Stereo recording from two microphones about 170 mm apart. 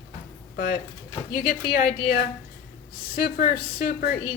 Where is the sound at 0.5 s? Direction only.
65° left (ahead or behind).